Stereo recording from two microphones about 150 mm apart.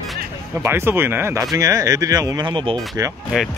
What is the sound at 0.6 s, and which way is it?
Speech, 15° right (ahead or behind).